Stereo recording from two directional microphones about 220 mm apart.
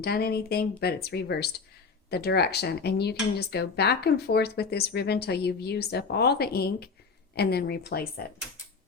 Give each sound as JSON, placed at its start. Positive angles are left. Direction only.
{"t": 0.0, "sound": "speech", "side_deg": 45}